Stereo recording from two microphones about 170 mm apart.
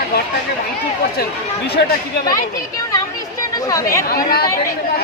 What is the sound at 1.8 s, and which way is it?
Speech, 85° left.